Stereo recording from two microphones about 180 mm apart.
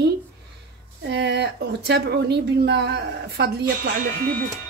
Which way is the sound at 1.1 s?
70° right (ahead or behind).